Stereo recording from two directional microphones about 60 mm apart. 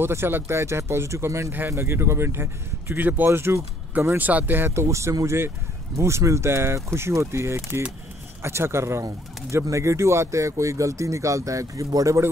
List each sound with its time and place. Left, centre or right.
0.0 s speech: right
4.2 s speech: right
4.7 s speech: right